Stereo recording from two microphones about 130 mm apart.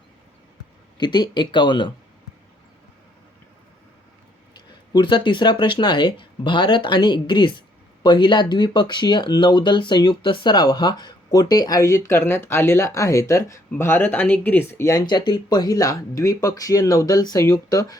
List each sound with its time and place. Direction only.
0.9 s speech: 35° left (ahead or behind)
4.9 s speech: 40° left (ahead or behind)